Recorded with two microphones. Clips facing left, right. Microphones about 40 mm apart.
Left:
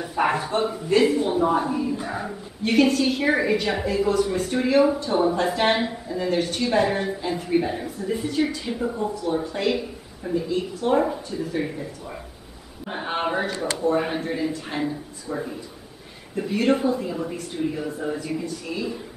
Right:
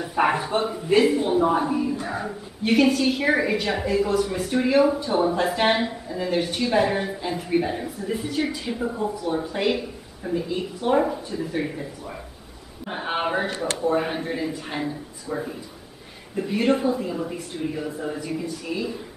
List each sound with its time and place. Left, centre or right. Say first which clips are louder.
0.1 s a woman's voice: right 1 dB; centre
11.0 s a woman's voice: even; centre